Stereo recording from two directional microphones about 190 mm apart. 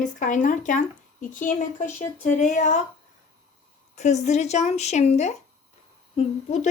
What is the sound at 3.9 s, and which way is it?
Speech, 35° left (ahead or behind).